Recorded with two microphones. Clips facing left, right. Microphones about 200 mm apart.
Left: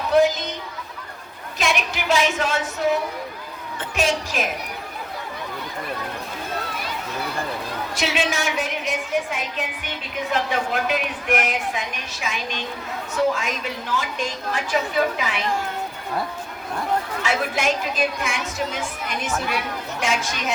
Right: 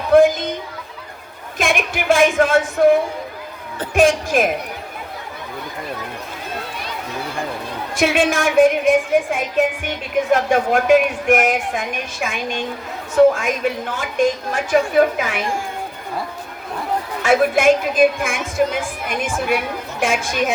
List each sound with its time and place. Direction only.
0.1 s a sound: 50° right (ahead or behind)
1.5 s a woman's voice: 50° right (ahead or behind)
7.9 s a woman's voice: 50° right (ahead or behind)
17.2 s a woman's voice: 50° right (ahead or behind)